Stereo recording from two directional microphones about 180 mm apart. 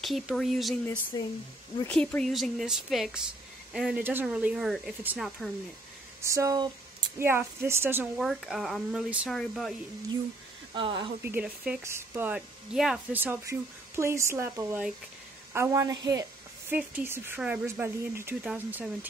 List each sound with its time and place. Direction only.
0.0 s speech: centre (ahead or behind)
1.9 s speech: 5° left (ahead or behind)
6.2 s speech: 15° right (ahead or behind)
8.2 s speech: centre (ahead or behind)
10.7 s speech: 30° right (ahead or behind)
11.2 s a woman's voice: 10° right (ahead or behind)